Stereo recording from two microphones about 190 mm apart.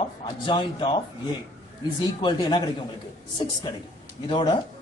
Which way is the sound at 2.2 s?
25° left (ahead or behind).